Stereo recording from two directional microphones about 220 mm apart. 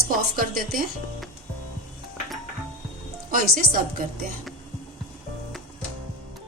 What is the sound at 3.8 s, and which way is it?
Speech, 40° right (ahead or behind).